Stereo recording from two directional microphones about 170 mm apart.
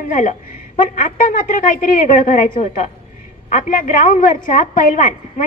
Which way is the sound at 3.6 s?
50° left (ahead or behind).